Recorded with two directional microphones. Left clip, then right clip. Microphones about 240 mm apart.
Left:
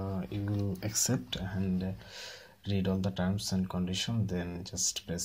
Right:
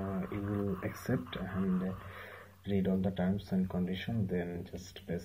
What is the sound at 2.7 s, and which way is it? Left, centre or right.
Speech, left.